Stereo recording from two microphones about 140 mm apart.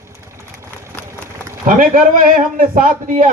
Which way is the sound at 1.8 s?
75° right (ahead or behind).